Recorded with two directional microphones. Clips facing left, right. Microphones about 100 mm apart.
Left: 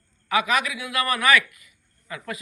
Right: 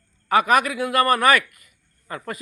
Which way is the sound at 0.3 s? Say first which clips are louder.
Right 5 dB; 45° right (ahead or behind).